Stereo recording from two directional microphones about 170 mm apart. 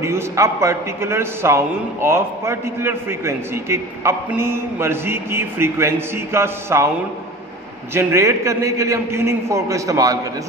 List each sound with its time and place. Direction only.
0.0 s a man's voice: 15° right (ahead or behind)
7.9 s a man's voice: 15° right (ahead or behind)